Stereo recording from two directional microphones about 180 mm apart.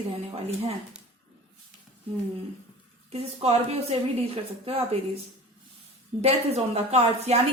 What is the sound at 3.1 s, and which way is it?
A woman's voice, 35° right (ahead or behind).